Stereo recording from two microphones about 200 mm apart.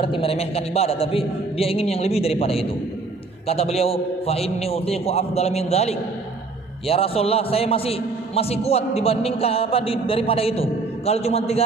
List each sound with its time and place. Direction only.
0.0 s a man's voice: 25° left (ahead or behind)